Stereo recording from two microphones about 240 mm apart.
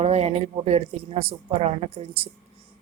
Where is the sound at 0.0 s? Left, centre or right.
Right.